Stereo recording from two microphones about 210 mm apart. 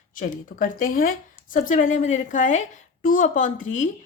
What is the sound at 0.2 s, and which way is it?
Speech, 40° left (ahead or behind).